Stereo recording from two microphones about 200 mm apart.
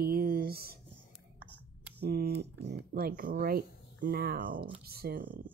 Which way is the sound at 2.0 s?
50° right (ahead or behind).